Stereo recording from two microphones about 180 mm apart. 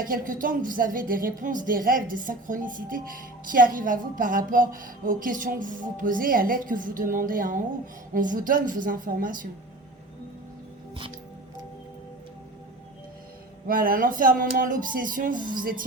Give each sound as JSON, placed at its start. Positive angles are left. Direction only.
{"t": 0.0, "sound": "a woman's voice", "side_deg": -50}
{"t": 13.7, "sound": "a woman's voice", "side_deg": -50}